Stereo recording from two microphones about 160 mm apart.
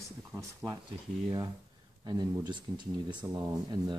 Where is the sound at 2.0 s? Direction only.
25° right (ahead or behind).